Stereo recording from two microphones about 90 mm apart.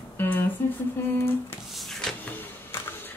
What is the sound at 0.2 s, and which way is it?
Speech, 25° left (ahead or behind).